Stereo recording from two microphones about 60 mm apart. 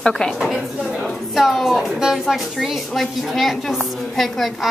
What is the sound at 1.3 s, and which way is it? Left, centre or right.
A woman's voice, centre.